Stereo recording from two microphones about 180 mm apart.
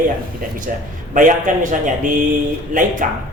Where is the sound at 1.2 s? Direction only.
45° right (ahead or behind).